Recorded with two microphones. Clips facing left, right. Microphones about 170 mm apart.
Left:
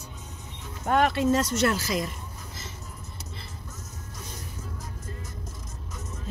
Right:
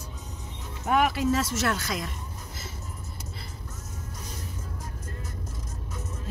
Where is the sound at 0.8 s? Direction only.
5° right (ahead or behind).